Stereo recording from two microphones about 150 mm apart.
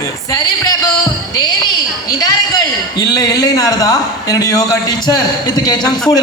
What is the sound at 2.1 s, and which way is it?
A man's voice, 25° left (ahead or behind).